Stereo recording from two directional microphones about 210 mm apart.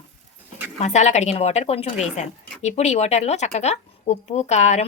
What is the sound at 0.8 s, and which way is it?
Speech, 35° left (ahead or behind).